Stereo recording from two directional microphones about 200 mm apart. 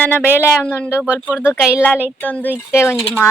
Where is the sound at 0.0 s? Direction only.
10° left (ahead or behind).